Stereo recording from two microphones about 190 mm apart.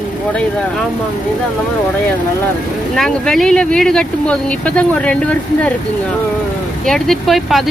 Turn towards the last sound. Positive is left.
turn(degrees=0)  # may be behind; listen again after turning